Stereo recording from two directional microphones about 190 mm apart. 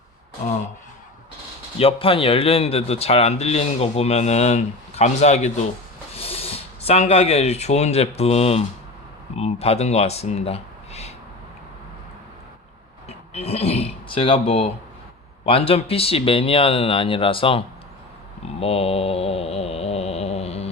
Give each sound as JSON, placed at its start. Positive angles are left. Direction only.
{"t": 1.8, "sound": "speech", "side_deg": 30}
{"t": 13.1, "sound": "speech", "side_deg": 35}
{"t": 18.4, "sound": "mantra", "side_deg": 30}